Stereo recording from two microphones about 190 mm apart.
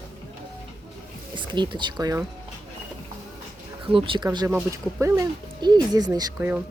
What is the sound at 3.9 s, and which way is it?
Speech, 25° right (ahead or behind).